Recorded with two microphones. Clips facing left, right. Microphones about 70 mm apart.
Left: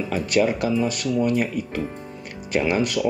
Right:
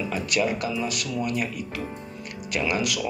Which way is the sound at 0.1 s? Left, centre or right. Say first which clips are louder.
Left 6 dB; left.